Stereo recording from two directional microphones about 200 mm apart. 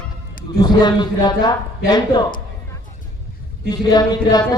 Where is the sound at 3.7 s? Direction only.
20° left (ahead or behind).